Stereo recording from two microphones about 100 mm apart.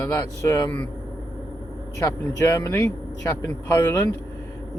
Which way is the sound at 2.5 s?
25° left (ahead or behind).